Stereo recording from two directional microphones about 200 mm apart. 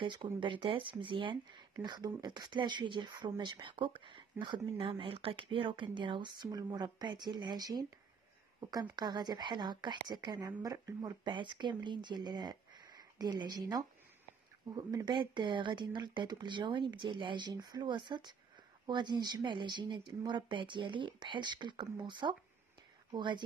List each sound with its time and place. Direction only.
0.0 s speech: 25° right (ahead or behind)